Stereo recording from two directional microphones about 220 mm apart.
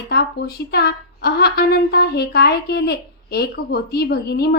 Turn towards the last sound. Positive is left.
turn(degrees=45)  # may be behind; listen again after turning